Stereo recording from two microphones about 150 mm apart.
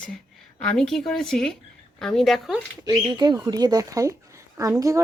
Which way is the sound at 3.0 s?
30° right (ahead or behind).